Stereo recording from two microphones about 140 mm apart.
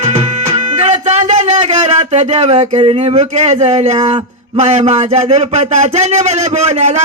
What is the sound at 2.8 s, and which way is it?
A man's voice, 40° right (ahead or behind).